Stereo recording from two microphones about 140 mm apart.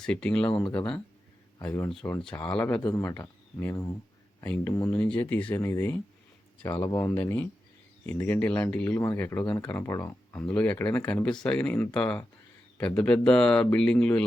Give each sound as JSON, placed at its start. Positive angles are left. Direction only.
{"t": 0.0, "sound": "speech", "side_deg": 5}
{"t": 1.6, "sound": "speech", "side_deg": 20}